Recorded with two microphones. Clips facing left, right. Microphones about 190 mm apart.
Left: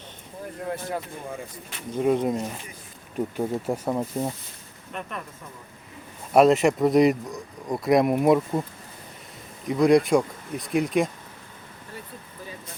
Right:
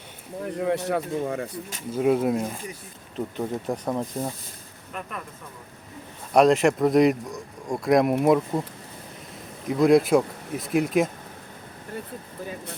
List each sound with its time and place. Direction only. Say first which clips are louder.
0.4 s speech: right 7 dB; 70° right (ahead or behind)
1.9 s speech: right 1 dB; 5° right (ahead or behind)
3.2 s speech: left 2 dB; 10° left (ahead or behind)
6.3 s speech: left 1 dB; centre (ahead or behind)
9.6 s speech: even; centre (ahead or behind)